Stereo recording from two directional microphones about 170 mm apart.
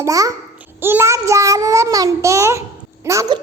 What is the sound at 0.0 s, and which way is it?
A child's voice, 20° right (ahead or behind).